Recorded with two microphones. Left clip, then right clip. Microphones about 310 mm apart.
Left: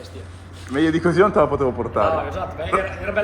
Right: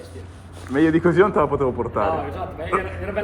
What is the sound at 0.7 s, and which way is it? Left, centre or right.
Speech, centre.